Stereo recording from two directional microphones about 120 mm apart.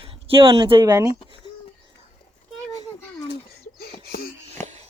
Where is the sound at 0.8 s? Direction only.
30° right (ahead or behind).